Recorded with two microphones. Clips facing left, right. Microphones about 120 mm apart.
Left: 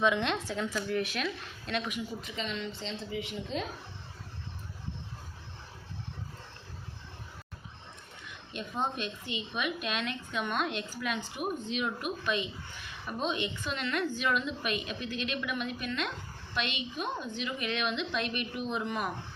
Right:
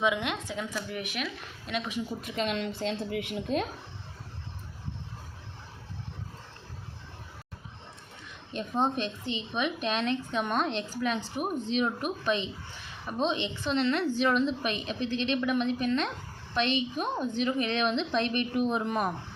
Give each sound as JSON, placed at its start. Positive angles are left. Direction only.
{"t": 0.0, "sound": "speech", "side_deg": -10}
{"t": 2.2, "sound": "a woman's voice", "side_deg": -55}
{"t": 8.5, "sound": "a woman's voice", "side_deg": -35}